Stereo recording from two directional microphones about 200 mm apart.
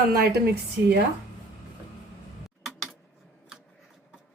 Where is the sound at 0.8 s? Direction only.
10° right (ahead or behind).